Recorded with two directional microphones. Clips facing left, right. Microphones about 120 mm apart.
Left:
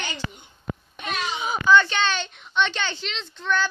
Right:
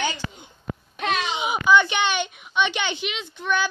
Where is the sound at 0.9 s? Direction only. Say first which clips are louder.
Right 5 dB; 80° right.